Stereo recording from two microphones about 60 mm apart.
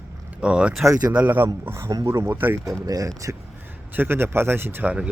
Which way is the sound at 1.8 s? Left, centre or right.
Right.